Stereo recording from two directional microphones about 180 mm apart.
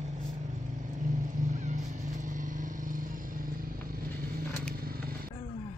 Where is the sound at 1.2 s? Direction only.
40° right (ahead or behind).